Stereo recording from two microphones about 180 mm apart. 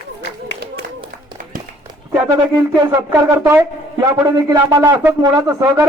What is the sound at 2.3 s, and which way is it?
Speech, 20° right (ahead or behind).